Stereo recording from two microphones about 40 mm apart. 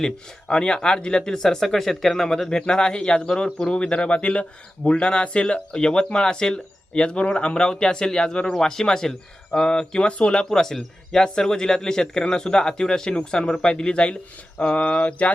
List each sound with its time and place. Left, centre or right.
0.0 s speech: centre
10.5 s speech: centre; by 15.3 s left